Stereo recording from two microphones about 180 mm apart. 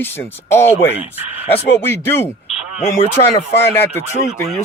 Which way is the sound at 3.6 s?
15° left (ahead or behind).